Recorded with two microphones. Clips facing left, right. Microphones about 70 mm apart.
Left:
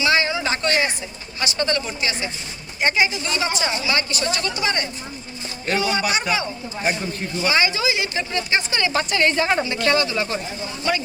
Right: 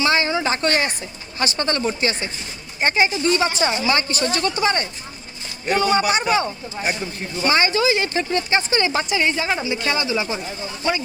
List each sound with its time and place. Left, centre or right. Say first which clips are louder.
0.0 s a sound: right 1 dB; right
1.4 s a woman's voice: right 1 dB; right
7.4 s a woman's voice: right 3 dB; right
9.1 s a woman's voice: left 2 dB; centre
9.6 s speech: left 2 dB; centre